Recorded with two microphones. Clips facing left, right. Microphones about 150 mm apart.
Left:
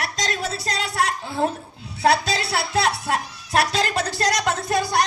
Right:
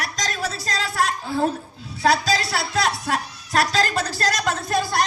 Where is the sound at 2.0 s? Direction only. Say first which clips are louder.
Even; 25° left (ahead or behind).